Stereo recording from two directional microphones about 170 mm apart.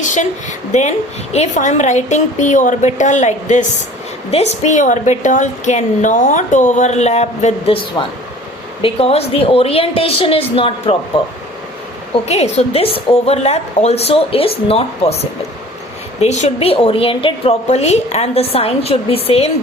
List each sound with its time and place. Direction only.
0.0 s a woman's voice: 45° left (ahead or behind)
8.0 s a woman's voice: 30° left (ahead or behind)
12.1 s a woman's voice: 40° left (ahead or behind)